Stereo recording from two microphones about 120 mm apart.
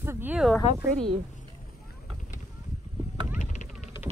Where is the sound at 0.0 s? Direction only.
20° right (ahead or behind).